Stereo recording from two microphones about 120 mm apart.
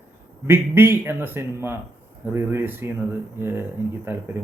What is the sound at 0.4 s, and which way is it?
A man's voice, 20° right (ahead or behind).